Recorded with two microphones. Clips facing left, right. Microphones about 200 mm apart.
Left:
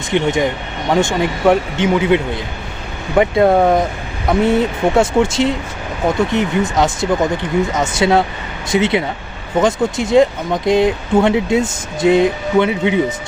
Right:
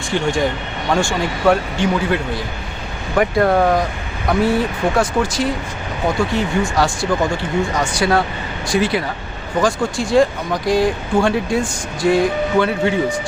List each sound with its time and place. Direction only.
0.1 s speech: 20° left (ahead or behind)